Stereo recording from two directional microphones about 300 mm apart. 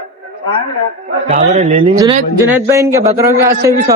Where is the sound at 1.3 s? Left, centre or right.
Right.